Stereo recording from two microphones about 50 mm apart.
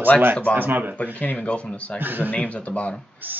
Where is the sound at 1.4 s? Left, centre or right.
Left.